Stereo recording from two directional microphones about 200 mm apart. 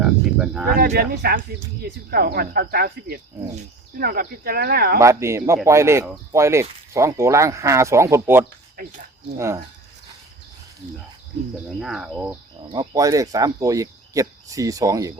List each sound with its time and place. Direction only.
0.0 s a sound: 5° right (ahead or behind)
0.8 s speech: 50° right (ahead or behind)
4.9 s speech: 15° right (ahead or behind)
8.8 s speech: 50° right (ahead or behind)
11.8 s speech: centre (ahead or behind)
12.6 s speech: 25° right (ahead or behind)